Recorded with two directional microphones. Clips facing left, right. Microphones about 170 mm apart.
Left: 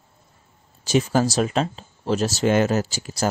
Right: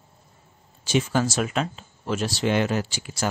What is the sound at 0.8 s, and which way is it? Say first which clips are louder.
Speech: left 3 dB; 40° left (ahead or behind).